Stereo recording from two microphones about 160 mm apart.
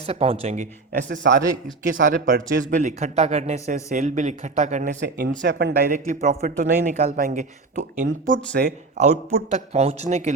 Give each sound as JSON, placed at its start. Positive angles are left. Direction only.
{"t": 0.0, "sound": "speech", "side_deg": -40}
{"t": 5.0, "sound": "speech", "side_deg": -70}
{"t": 5.9, "sound": "speech", "side_deg": -50}